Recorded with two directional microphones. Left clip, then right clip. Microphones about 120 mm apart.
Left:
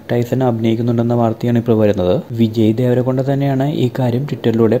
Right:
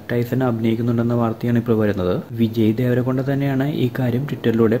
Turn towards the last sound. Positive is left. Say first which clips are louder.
# left 3 dB
turn(degrees=30)  # may be behind; listen again after turning